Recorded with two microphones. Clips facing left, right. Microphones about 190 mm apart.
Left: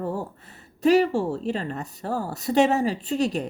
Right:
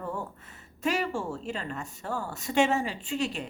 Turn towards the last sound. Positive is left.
turn(degrees=40)  # may be behind; listen again after turning